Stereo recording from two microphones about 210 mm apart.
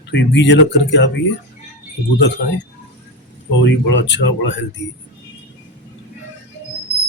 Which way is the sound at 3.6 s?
60° left (ahead or behind).